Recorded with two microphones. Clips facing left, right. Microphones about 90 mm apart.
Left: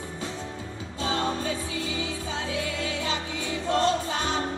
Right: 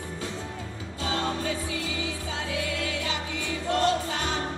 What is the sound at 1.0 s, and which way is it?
Music, 25° left (ahead or behind).